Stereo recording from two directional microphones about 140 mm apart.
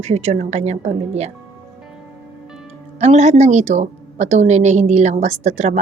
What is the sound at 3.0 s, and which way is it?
A woman's voice, 50° right (ahead or behind).